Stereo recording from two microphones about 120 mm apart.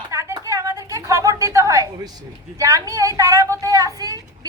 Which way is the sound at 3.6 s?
30° right (ahead or behind).